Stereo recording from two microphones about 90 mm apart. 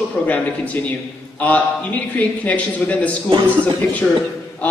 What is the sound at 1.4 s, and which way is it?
A man's voice, 15° left (ahead or behind).